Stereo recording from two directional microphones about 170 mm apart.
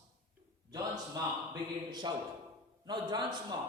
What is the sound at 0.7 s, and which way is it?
A man's voice, 20° right (ahead or behind).